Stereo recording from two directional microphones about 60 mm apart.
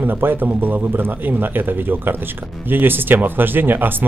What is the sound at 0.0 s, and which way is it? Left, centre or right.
Speech, right.